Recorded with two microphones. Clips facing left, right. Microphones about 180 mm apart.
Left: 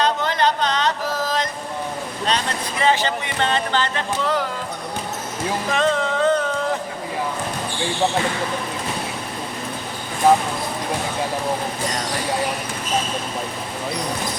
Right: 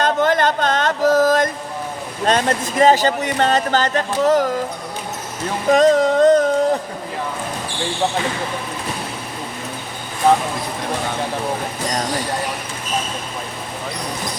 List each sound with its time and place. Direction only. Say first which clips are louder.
0.0 s music: right 3 dB; 50° right (ahead or behind)
2.2 s speech: right 7 dB; 45° right (ahead or behind)
5.7 s a sound: right 9 dB; 40° right (ahead or behind)